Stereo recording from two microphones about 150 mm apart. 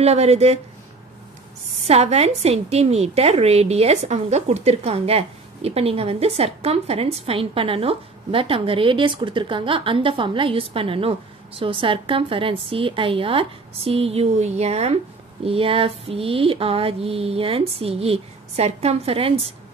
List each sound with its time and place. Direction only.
0.0 s speech: 45° right (ahead or behind)
1.8 s a woman's voice: 45° right (ahead or behind)